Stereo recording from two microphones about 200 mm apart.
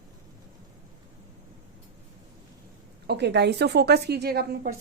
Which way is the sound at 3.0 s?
55° right (ahead or behind).